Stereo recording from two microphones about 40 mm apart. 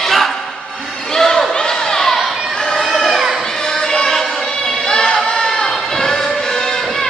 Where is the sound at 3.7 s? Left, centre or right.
Centre.